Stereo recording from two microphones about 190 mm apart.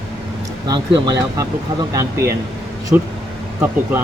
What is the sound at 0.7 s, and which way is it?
Speech, 20° right (ahead or behind).